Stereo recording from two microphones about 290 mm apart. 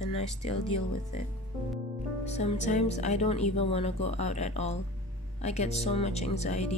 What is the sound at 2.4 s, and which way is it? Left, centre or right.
Speech, left.